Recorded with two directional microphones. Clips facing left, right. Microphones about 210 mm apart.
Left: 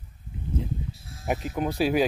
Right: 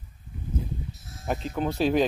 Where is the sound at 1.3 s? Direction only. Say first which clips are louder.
Even; 5° left (ahead or behind).